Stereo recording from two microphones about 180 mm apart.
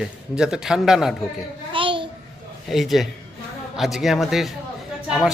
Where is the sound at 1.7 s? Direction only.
30° right (ahead or behind).